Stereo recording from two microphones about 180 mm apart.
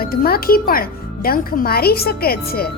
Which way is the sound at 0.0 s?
55° left (ahead or behind).